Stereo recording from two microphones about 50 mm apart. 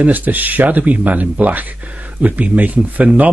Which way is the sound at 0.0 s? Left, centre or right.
Right.